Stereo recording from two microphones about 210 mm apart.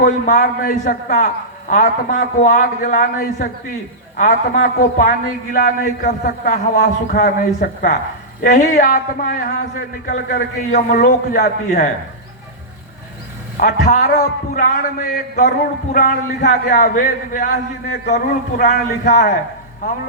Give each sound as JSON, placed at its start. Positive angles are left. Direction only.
{"t": 0.0, "sound": "a man's voice", "side_deg": 45}
{"t": 13.6, "sound": "a man's voice", "side_deg": 40}